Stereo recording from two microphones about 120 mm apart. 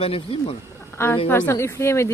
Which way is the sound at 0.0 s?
50° left (ahead or behind).